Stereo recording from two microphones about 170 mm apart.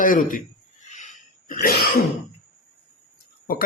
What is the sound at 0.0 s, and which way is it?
Speech, 55° left (ahead or behind).